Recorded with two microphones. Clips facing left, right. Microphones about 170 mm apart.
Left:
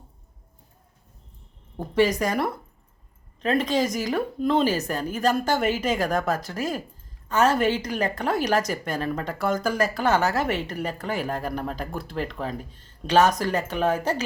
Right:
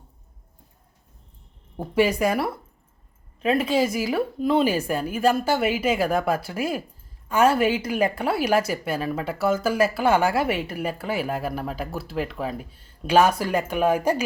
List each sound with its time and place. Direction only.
1.7 s a woman's voice: 10° right (ahead or behind)